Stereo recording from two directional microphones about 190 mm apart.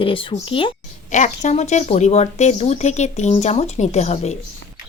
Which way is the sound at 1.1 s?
40° left (ahead or behind).